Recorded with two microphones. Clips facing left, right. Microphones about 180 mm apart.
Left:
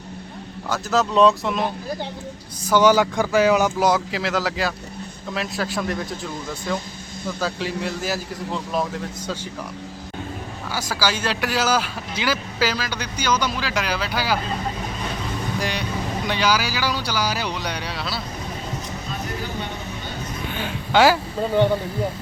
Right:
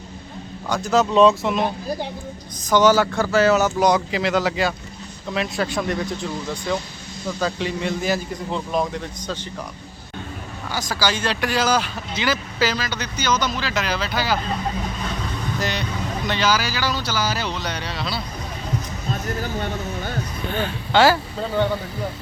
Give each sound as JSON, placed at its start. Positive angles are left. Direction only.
{"t": 0.7, "sound": "speech", "side_deg": 0}
{"t": 2.6, "sound": "speech", "side_deg": 10}
{"t": 10.7, "sound": "speech", "side_deg": 10}
{"t": 15.5, "sound": "speech", "side_deg": 10}
{"t": 20.6, "sound": "speech", "side_deg": 10}